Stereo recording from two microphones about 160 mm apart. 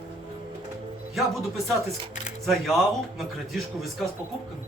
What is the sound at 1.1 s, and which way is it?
A man's voice, centre (ahead or behind).